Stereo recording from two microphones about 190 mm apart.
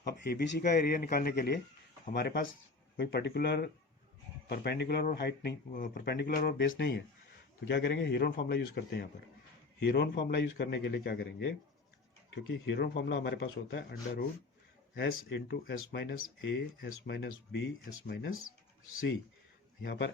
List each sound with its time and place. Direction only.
0.0 s speech: 60° left (ahead or behind)
6.6 s speech: 70° left (ahead or behind); by 18.3 s 55° left (ahead or behind)
19.8 s speech: 60° left (ahead or behind)